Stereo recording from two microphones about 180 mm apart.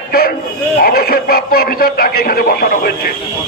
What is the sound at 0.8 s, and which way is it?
A man's voice, 55° left (ahead or behind).